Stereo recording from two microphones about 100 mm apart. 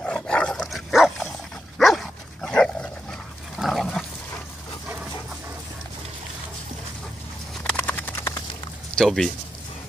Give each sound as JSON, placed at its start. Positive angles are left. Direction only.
{"t": 0.0, "sound": "dog", "side_deg": 10}
{"t": 7.6, "sound": "horse", "side_deg": 15}
{"t": 8.9, "sound": "speech", "side_deg": 5}